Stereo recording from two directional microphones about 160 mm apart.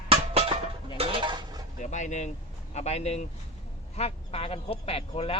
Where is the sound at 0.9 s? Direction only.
30° right (ahead or behind).